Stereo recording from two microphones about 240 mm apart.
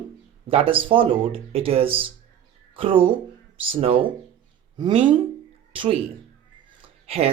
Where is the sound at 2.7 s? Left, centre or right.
Right.